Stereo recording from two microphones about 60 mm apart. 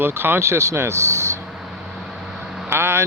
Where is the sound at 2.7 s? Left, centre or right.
Right.